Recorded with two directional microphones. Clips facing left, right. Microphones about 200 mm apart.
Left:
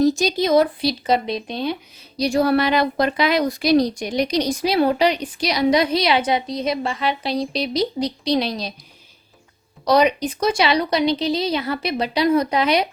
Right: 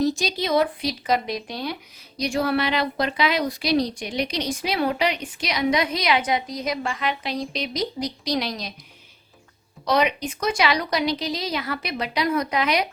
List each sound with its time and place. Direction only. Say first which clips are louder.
0.0 s a woman's voice: left 6 dB; 45° left (ahead or behind); by 1.7 s 25° left (ahead or behind)
2.1 s a woman's voice: left 5 dB; 35° left (ahead or behind)
9.8 s a woman's voice: left 5 dB; 35° left (ahead or behind)